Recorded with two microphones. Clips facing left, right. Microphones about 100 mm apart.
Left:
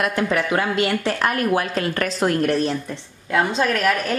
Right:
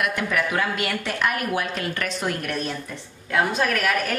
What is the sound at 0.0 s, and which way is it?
A woman's voice, 30° left (ahead or behind).